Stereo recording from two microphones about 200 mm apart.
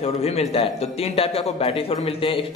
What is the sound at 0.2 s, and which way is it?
A man's voice, 30° left (ahead or behind).